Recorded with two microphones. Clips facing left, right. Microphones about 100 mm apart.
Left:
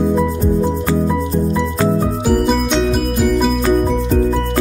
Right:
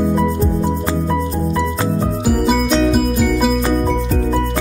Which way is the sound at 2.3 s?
Centre (ahead or behind).